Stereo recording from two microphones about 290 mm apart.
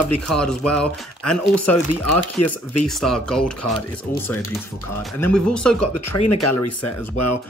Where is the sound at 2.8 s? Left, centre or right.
Centre.